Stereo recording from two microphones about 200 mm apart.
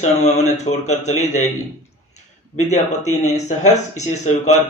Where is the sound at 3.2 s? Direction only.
35° left (ahead or behind).